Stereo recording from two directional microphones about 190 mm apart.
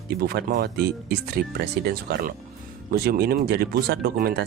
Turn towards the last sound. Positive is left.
turn(degrees=-55)  # may be behind; listen again after turning